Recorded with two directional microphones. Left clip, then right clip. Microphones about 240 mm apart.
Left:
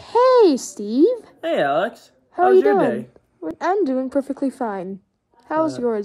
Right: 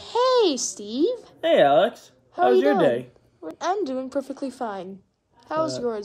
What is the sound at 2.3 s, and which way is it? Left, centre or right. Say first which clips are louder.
A woman's voice: left 4 dB; left.